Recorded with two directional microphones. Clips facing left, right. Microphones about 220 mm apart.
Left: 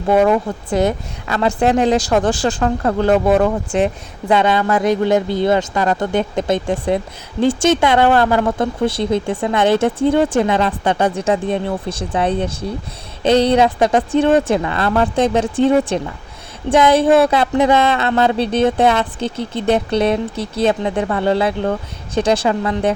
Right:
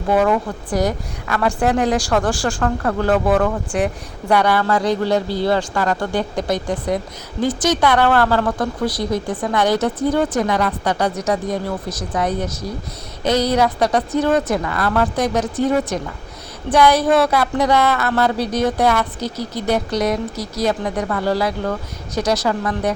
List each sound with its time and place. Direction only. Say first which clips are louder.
0.1 s a woman's voice: left 3 dB; 25° left (ahead or behind)